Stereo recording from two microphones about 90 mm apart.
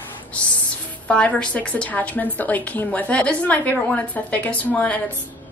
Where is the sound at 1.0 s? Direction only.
15° left (ahead or behind).